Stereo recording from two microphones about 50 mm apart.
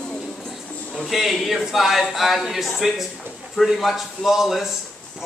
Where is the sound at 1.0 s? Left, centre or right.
Centre.